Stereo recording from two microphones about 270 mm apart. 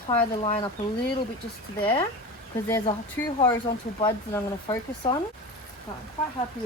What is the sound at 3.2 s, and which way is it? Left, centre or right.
Speech, centre.